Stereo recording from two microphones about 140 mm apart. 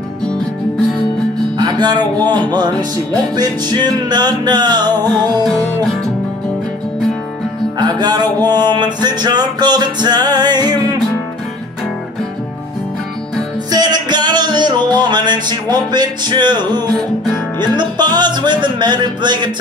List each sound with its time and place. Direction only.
1.6 s music: 30° right (ahead or behind)
3.3 s music: 30° right (ahead or behind)
7.8 s music: 30° right (ahead or behind)
13.7 s music: 30° right (ahead or behind)